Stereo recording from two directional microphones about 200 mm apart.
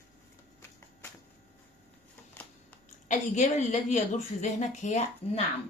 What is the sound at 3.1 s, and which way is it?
A woman's voice, 35° left (ahead or behind).